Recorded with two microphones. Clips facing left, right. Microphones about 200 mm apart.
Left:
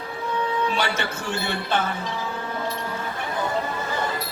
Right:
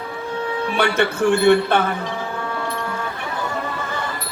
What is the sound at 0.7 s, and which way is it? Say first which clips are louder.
A man's voice: right 7 dB; 55° right (ahead or behind).